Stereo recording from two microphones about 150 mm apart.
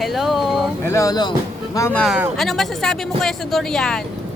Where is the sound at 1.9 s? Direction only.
5° left (ahead or behind).